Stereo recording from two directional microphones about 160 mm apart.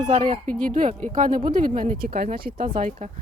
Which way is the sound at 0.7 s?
55° right (ahead or behind).